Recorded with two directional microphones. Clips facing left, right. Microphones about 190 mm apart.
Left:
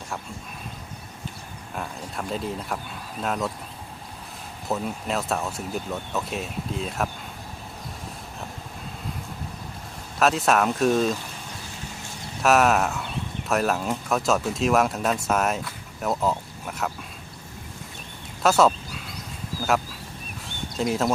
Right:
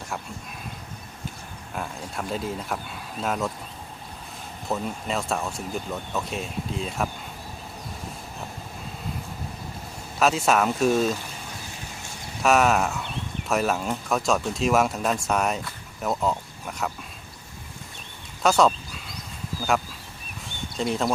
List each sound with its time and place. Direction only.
1.7 s speech: centre (ahead or behind)
4.7 s speech: centre (ahead or behind)
10.2 s speech: centre (ahead or behind)
12.4 s speech: centre (ahead or behind)
18.4 s duck: centre (ahead or behind)
20.7 s speech: 5° left (ahead or behind)